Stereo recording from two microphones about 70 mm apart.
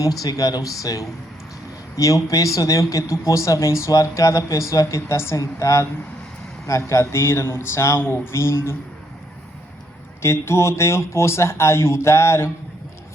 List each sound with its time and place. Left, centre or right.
0.0 s speech: left
10.2 s speech: left